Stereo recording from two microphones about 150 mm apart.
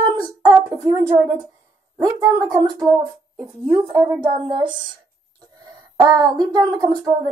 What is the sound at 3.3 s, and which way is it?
Speech, 35° right (ahead or behind).